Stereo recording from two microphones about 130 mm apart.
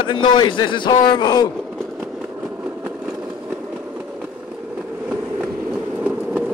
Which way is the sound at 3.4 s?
10° right (ahead or behind).